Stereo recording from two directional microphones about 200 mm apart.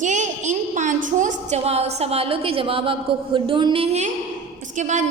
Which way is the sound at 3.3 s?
25° right (ahead or behind).